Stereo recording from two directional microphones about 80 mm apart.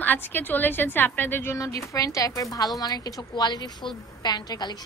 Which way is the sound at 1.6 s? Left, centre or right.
Left.